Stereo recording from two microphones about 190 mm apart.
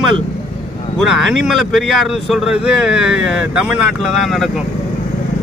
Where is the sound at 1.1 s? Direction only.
Centre (ahead or behind).